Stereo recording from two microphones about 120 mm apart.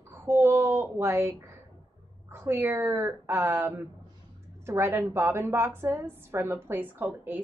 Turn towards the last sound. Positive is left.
turn(degrees=-15)  # may be behind; listen again after turning